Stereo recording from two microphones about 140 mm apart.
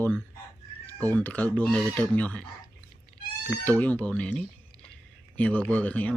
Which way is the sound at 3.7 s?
10° left (ahead or behind).